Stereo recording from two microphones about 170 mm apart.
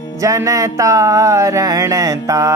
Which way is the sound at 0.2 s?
20° right (ahead or behind).